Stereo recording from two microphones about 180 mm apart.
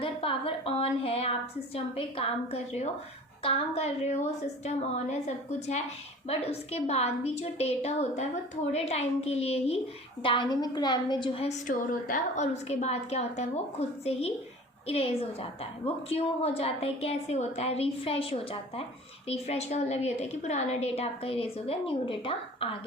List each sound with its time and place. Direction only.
0.0 s a woman's voice: 30° left (ahead or behind)
11.4 s a woman's voice: 45° left (ahead or behind); by 22.7 s 30° left (ahead or behind)